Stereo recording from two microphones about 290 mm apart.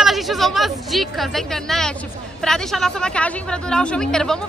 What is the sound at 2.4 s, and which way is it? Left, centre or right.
Speech, centre.